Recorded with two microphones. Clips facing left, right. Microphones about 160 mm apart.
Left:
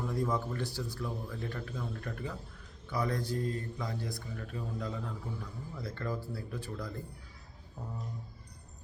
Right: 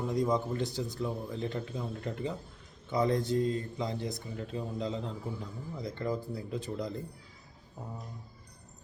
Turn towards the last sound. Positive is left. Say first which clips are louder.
# right 5 dB
turn(degrees=-20)  # may be behind; listen again after turning